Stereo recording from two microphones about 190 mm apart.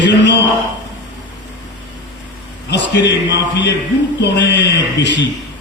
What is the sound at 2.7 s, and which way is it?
Speech, 65° left (ahead or behind).